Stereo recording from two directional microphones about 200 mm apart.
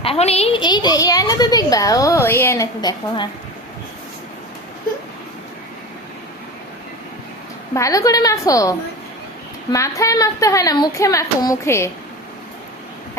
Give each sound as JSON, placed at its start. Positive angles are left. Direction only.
{"t": 0.0, "sound": "a woman's voice", "side_deg": 30}
{"t": 7.7, "sound": "a woman's voice", "side_deg": 15}
{"t": 9.7, "sound": "a woman's voice", "side_deg": 15}